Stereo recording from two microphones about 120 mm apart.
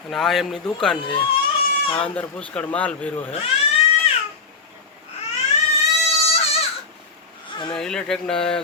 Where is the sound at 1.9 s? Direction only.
10° left (ahead or behind).